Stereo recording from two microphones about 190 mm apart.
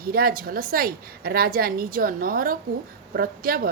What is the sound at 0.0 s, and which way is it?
A woman's voice, 50° right (ahead or behind).